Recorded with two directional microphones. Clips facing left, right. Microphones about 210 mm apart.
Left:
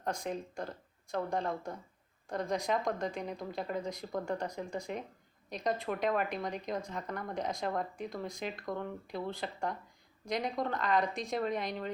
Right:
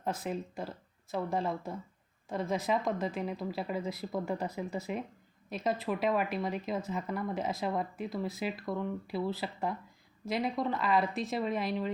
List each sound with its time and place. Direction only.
0.0 s speech: 5° right (ahead or behind)